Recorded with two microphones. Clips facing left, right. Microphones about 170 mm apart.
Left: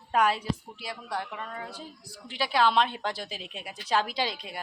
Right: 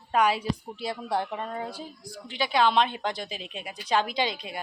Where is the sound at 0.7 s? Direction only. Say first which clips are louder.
Right 6 dB; 25° right (ahead or behind).